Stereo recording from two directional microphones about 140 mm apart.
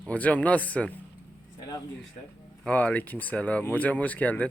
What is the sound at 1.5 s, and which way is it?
Speech, 30° left (ahead or behind).